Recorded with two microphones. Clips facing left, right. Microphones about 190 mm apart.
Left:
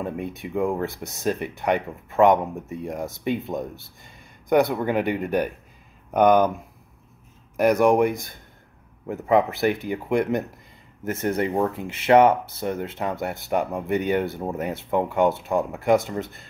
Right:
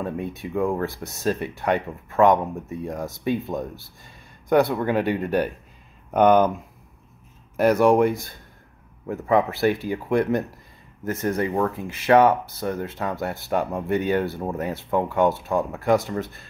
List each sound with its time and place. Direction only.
0.0 s speech: 10° left (ahead or behind)
7.8 s speech: 15° left (ahead or behind)